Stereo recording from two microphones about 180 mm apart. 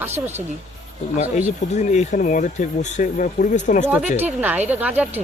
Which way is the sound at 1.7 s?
40° left (ahead or behind).